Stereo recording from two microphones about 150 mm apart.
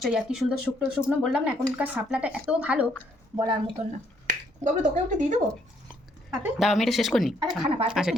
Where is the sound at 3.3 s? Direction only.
35° right (ahead or behind).